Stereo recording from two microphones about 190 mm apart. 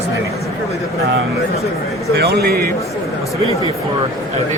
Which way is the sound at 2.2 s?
60° right (ahead or behind).